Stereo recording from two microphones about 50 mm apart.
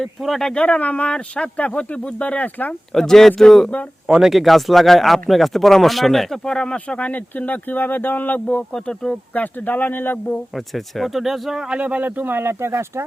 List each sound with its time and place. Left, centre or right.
0.2 s speech: centre
0.4 s speech: centre
2.9 s speech: centre
4.0 s speech: centre
6.5 s speech: centre; by 8.6 s left
8.7 s speech: centre
9.3 s speech: left
10.5 s speech: centre
11.8 s speech: right